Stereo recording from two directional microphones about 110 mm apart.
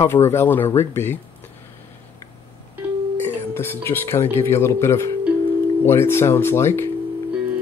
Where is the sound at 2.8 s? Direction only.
10° right (ahead or behind).